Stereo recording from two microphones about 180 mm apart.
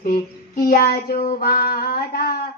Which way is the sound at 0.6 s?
60° left (ahead or behind).